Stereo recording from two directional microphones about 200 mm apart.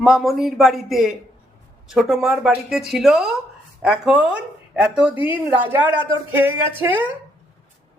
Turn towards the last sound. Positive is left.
turn(degrees=-10)  # may be behind; listen again after turning